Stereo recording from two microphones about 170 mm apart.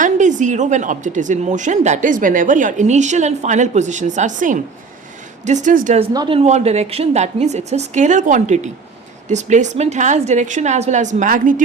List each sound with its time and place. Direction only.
0.0 s speech: 45° right (ahead or behind)
6.1 s a woman's voice: 30° right (ahead or behind); by 11.6 s 50° right (ahead or behind)